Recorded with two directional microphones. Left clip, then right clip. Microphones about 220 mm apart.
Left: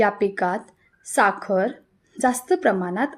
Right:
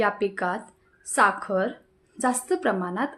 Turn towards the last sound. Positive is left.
turn(degrees=20)  # may be behind; listen again after turning